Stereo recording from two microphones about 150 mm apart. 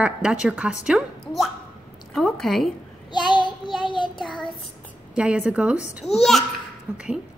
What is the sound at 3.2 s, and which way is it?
Child singing, 30° left (ahead or behind).